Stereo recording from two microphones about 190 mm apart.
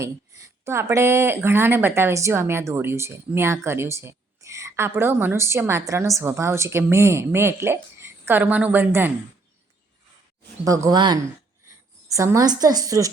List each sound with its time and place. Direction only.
0.0 s a woman's voice: 15° right (ahead or behind)
10.8 s a woman's voice: 20° right (ahead or behind)